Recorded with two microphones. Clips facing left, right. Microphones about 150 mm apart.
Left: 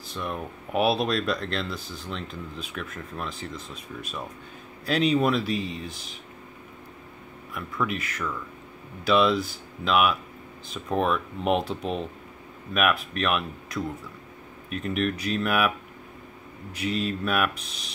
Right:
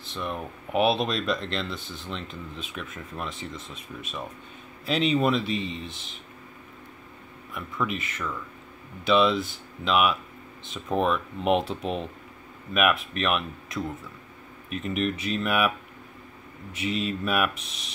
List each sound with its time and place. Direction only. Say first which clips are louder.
0.1 s speech: even; centre (ahead or behind)
7.5 s speech: left 1 dB; centre (ahead or behind)
13.1 s speech: even; centre (ahead or behind)
16.7 s speech: left 1 dB; centre (ahead or behind)